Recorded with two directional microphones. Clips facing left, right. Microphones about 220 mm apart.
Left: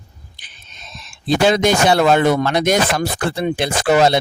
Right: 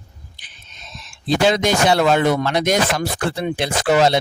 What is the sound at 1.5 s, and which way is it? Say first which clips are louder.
Speech: left 3 dB; 55° left (ahead or behind).